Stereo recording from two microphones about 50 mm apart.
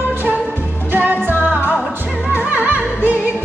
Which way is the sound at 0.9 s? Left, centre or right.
Right.